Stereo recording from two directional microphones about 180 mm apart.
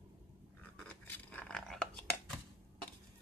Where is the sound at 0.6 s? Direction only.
10° left (ahead or behind).